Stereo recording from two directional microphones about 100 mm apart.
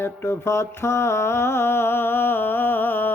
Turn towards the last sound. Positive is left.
turn(degrees=20)  # may be behind; listen again after turning